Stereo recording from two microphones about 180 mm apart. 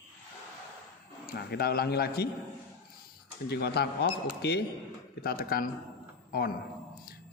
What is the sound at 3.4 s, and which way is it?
A man's voice, 65° left (ahead or behind).